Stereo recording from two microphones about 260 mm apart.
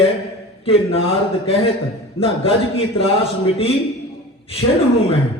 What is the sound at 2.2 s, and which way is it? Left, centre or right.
Speech, left.